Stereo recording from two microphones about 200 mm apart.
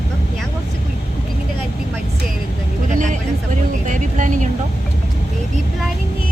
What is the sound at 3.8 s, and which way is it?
Vehicle, 40° right (ahead or behind).